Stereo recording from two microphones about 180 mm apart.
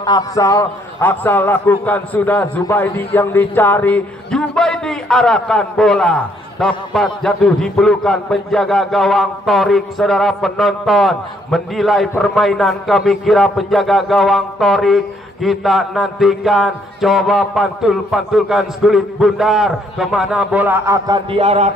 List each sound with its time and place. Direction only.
0.0 s a man's voice: 20° left (ahead or behind); by 21.2 s 15° right (ahead or behind)
21.3 s speech: 35° right (ahead or behind)